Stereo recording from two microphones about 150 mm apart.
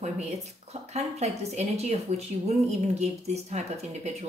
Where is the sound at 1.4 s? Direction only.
45° right (ahead or behind).